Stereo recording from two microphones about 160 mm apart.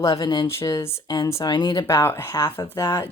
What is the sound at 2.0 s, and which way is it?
Speech, 15° left (ahead or behind).